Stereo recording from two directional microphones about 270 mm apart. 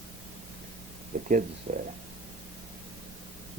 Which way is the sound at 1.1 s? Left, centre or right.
Right.